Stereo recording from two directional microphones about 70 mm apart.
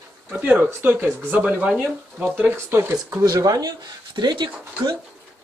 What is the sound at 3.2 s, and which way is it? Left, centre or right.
Speech, right.